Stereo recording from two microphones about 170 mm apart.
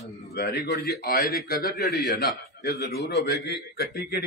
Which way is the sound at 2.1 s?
70° left (ahead or behind).